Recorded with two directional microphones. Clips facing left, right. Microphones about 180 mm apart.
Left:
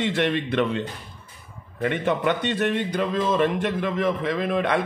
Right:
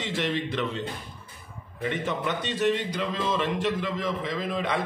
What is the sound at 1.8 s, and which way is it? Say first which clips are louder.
Speech: left 6 dB; 60° left (ahead or behind).